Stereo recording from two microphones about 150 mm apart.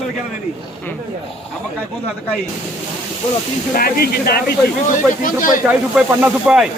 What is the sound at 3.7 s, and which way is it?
Speech, 75° left (ahead or behind).